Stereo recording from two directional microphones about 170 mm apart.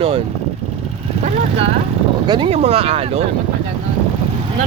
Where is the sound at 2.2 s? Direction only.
30° right (ahead or behind).